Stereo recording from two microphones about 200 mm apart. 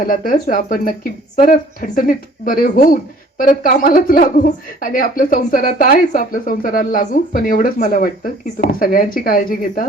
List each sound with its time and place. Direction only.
0.0 s speech: 45° left (ahead or behind)